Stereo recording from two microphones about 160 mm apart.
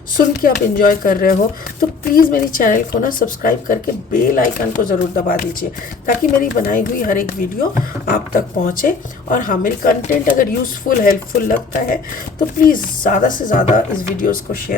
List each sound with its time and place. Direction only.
0.4 s a woman's voice: 60° left (ahead or behind)